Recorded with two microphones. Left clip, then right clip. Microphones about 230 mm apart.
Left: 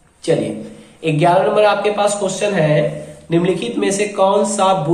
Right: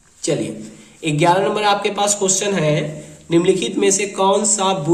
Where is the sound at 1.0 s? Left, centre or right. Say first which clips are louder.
Left 2 dB; right.